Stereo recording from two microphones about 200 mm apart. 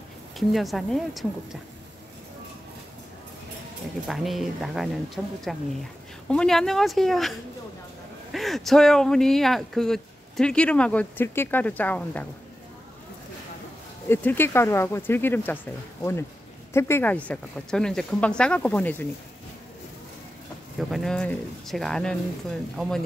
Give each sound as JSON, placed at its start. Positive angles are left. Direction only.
{"t": 0.4, "sound": "speech", "side_deg": 0}
{"t": 4.1, "sound": "speech", "side_deg": 0}
{"t": 14.0, "sound": "speech", "side_deg": 10}
{"t": 20.9, "sound": "speech", "side_deg": 0}